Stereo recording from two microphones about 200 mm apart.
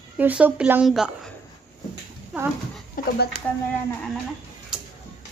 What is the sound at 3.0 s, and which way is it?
Speech, 45° left (ahead or behind).